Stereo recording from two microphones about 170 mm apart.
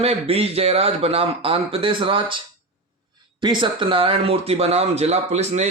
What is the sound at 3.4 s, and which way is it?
A man's voice, 30° right (ahead or behind).